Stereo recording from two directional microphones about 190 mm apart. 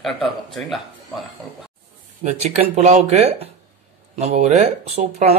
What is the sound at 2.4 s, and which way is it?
Speech, 35° right (ahead or behind).